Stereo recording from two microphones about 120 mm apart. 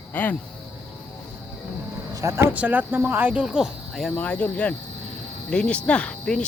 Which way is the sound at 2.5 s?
15° right (ahead or behind).